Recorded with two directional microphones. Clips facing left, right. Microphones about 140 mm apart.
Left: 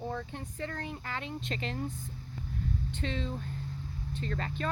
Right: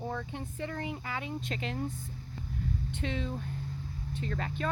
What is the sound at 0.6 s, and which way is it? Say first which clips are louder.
A woman's voice: right 1 dB; 10° right (ahead or behind).